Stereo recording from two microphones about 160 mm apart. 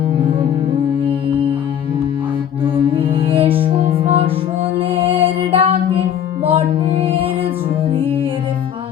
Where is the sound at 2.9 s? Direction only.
30° right (ahead or behind).